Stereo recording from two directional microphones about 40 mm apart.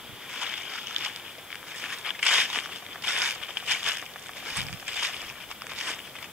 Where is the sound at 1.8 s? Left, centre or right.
Centre.